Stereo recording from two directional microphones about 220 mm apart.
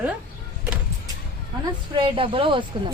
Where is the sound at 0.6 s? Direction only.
5° right (ahead or behind).